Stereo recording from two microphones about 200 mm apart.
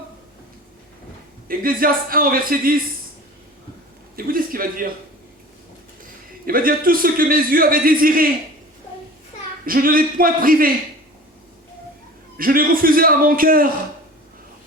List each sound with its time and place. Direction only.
1.5 s a man's voice: 45° right (ahead or behind)
4.1 s a sound: 45° right (ahead or behind)
6.4 s a man's voice: 45° right (ahead or behind)
9.6 s a man's voice: 45° right (ahead or behind)
12.4 s a man's voice: 45° right (ahead or behind)